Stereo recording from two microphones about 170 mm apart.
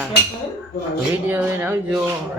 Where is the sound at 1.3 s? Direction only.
15° right (ahead or behind).